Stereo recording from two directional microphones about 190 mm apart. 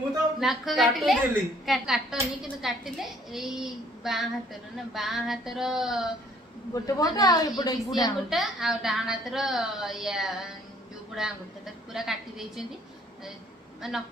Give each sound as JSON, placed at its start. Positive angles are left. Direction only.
{"t": 0.4, "sound": "a woman's voice", "side_deg": 0}
{"t": 6.7, "sound": "speech", "side_deg": 20}
{"t": 8.3, "sound": "a woman's voice", "side_deg": 0}
{"t": 13.7, "sound": "speech", "side_deg": 0}